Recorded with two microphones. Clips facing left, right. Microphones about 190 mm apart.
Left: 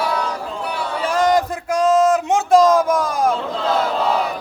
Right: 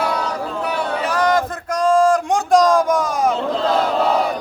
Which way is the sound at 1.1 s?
25° left (ahead or behind).